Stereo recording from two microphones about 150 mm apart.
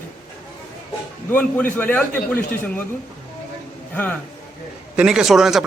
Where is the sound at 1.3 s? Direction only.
10° left (ahead or behind).